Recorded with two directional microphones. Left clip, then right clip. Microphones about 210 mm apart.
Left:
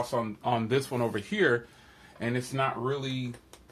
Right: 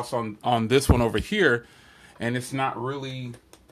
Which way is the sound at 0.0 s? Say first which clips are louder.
Right 3 dB; 50° right (ahead or behind).